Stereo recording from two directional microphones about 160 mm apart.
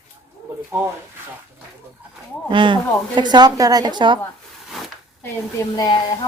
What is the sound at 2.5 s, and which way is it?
A woman's voice, 30° right (ahead or behind).